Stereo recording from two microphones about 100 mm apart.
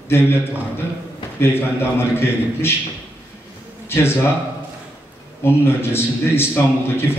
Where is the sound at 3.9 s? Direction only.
25° left (ahead or behind).